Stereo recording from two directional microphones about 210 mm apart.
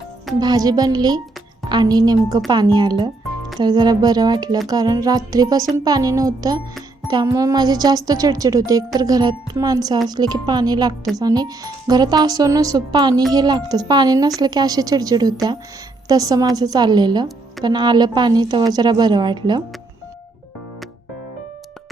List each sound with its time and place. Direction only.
0.3 s a woman's voice: 20° right (ahead or behind)